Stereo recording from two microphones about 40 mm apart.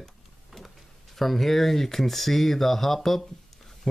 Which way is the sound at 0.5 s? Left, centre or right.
Centre.